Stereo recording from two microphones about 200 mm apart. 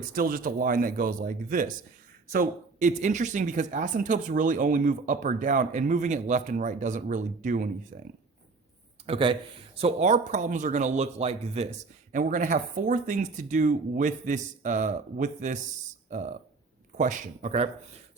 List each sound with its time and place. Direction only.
0.1 s speech: 45° right (ahead or behind)
9.0 s speech: 25° right (ahead or behind)
12.1 s speech: 40° right (ahead or behind)